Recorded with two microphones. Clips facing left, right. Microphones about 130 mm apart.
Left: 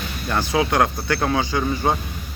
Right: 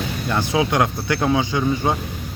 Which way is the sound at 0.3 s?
20° right (ahead or behind).